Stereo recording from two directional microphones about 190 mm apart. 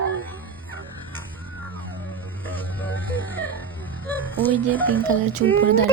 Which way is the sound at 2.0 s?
10° left (ahead or behind).